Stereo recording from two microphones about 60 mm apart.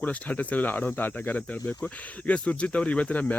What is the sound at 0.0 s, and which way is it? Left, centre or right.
Speech, left.